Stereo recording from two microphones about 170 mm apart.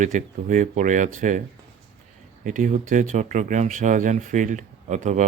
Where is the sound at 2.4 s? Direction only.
45° right (ahead or behind).